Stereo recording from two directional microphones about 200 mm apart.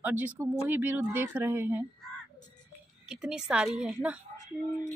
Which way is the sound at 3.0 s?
5° right (ahead or behind).